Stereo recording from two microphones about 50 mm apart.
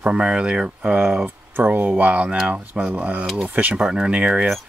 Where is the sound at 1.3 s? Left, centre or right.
Right.